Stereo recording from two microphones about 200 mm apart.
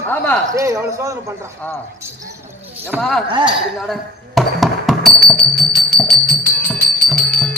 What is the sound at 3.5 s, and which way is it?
Music, centre (ahead or behind).